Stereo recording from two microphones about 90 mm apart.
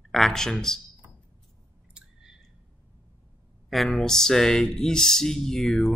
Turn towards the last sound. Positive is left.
turn(degrees=5)  # may be behind; listen again after turning